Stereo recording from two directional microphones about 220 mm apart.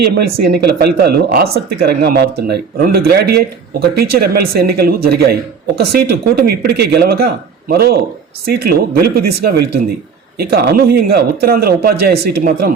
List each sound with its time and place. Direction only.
0.2 s speech: 45° right (ahead or behind)